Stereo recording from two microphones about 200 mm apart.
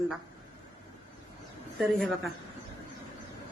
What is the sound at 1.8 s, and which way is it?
Speech, centre (ahead or behind).